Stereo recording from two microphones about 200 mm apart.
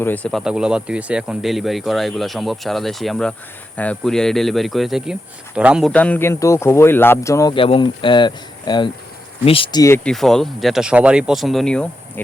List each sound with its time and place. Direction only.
0.0 s speech: 10° left (ahead or behind)
5.9 s speech: 5° left (ahead or behind); by 9.8 s 25° left (ahead or behind)
9.8 s speech: 10° left (ahead or behind)